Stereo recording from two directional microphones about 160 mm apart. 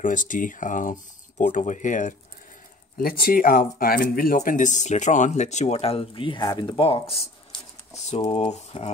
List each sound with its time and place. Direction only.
0.0 s speech: 55° left (ahead or behind)
3.0 s speech: 65° left (ahead or behind); by 8.9 s 45° left (ahead or behind)